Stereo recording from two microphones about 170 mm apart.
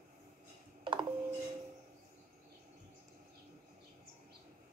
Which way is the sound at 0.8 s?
30° right (ahead or behind).